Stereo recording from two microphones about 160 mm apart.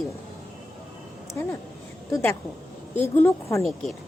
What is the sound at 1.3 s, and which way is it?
Speech, 15° left (ahead or behind).